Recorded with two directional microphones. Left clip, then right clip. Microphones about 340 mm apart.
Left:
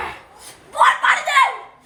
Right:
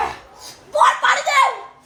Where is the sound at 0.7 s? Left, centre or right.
Centre.